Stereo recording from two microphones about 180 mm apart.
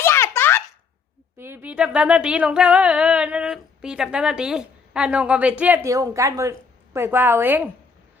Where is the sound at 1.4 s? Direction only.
10° right (ahead or behind).